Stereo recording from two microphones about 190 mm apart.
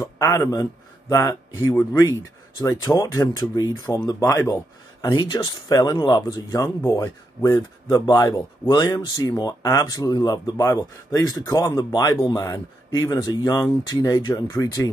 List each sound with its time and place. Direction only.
0.0 s speech: 15° left (ahead or behind)